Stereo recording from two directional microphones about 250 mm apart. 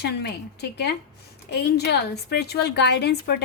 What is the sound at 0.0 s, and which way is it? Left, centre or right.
A woman's voice, left.